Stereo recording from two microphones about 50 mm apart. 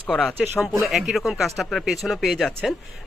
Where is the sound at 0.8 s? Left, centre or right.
Centre.